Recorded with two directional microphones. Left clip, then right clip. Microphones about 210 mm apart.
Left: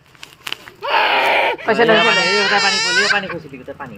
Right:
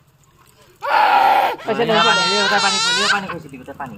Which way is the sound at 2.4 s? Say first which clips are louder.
Left 1 dB; 5° right (ahead or behind).